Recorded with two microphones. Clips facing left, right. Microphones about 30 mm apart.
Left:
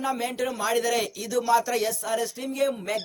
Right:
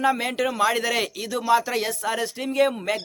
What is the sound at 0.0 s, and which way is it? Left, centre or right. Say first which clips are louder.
A man's voice: right 5 dB; right.